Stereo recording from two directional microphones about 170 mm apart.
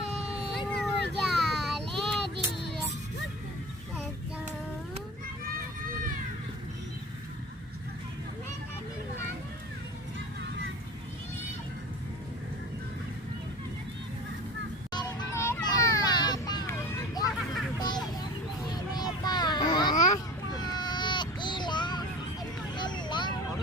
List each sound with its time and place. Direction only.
0.8 s child singing: centre (ahead or behind)
14.9 s vehicle: 15° left (ahead or behind)
17.3 s hubbub: centre (ahead or behind)
17.7 s vehicle: 25° left (ahead or behind)
20.1 s a sound: 25° left (ahead or behind)
22.8 s vehicle: 25° left (ahead or behind)